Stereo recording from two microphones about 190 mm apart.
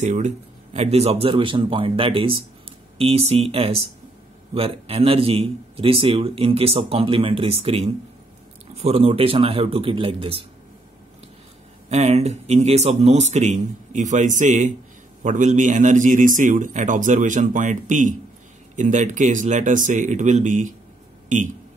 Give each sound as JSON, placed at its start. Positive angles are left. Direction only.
{"t": 0.0, "sound": "a man's voice", "side_deg": -40}
{"t": 11.9, "sound": "a man's voice", "side_deg": -35}